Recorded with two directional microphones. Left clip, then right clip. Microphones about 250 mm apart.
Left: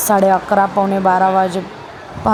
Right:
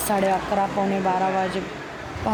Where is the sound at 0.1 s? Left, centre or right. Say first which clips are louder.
Left 9 dB; left.